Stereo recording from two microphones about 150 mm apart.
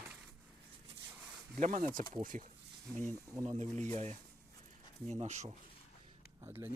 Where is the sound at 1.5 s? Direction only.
60° right (ahead or behind).